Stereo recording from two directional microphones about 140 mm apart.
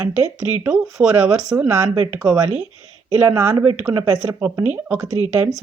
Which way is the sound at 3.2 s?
20° right (ahead or behind).